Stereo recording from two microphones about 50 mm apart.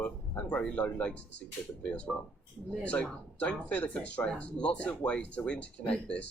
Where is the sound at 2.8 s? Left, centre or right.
Left.